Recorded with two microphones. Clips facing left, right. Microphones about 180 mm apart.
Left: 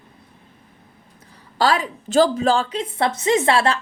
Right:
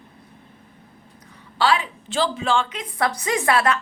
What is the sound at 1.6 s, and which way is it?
A woman's voice, 40° left (ahead or behind).